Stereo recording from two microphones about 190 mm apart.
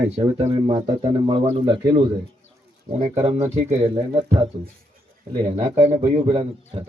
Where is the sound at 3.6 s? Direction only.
35° right (ahead or behind).